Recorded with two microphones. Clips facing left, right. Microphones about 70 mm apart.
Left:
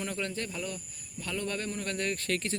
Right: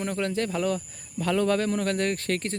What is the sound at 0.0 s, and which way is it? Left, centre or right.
A man's voice, right.